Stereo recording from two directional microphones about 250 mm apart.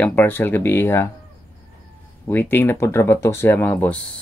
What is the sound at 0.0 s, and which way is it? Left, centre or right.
Speech, centre.